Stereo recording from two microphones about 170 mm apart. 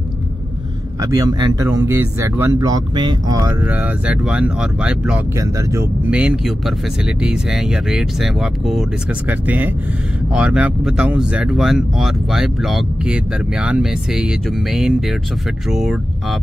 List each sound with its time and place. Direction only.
1.1 s speech: 20° right (ahead or behind)
3.6 s speech: 10° right (ahead or behind)
5.4 s speech: 15° right (ahead or behind)
6.0 s speech: 5° right (ahead or behind)